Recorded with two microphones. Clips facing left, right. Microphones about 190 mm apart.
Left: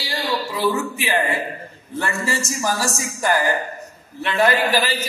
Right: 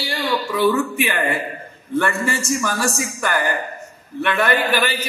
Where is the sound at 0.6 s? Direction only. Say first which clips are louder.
Right 6 dB; 60° right (ahead or behind).